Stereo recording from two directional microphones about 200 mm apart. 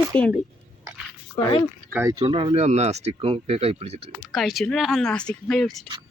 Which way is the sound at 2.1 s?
25° right (ahead or behind).